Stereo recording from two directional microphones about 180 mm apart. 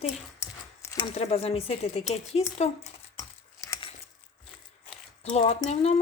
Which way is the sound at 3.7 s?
25° left (ahead or behind).